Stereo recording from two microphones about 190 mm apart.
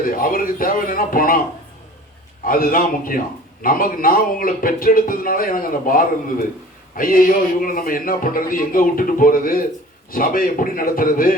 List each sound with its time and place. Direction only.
0.0 s a man's voice: 50° left (ahead or behind)
2.5 s a man's voice: 50° left (ahead or behind)